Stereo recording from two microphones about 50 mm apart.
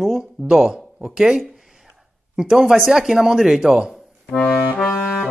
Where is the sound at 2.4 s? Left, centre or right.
Centre.